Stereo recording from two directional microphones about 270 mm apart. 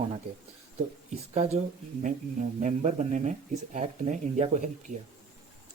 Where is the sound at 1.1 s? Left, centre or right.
Right.